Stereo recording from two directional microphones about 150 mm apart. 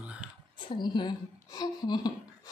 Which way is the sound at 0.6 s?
30° left (ahead or behind).